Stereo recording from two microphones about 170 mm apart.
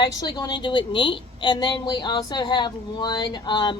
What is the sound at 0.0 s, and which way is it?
Speech, 25° left (ahead or behind).